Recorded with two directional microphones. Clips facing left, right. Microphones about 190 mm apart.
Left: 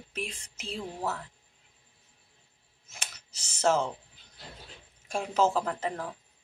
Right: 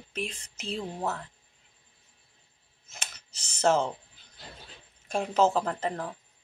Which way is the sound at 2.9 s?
10° left (ahead or behind).